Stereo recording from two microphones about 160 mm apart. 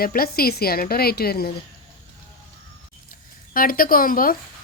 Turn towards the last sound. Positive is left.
turn(degrees=65)  # may be behind; listen again after turning